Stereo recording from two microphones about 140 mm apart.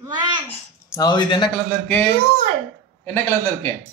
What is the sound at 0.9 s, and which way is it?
Speech, 30° left (ahead or behind).